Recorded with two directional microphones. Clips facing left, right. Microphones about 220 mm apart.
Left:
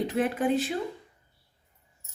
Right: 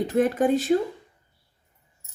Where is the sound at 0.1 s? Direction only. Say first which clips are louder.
Right 8 dB; 45° right (ahead or behind).